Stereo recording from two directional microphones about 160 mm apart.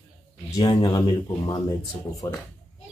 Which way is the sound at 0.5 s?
25° left (ahead or behind).